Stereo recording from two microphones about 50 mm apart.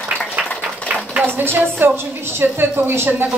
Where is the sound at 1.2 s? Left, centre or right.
Right.